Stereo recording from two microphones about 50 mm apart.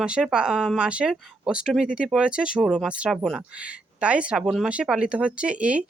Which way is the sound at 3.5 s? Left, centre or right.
Right.